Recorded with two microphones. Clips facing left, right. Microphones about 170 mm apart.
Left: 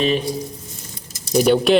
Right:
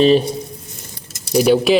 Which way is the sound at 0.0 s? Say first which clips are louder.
Right 7 dB; 30° right (ahead or behind).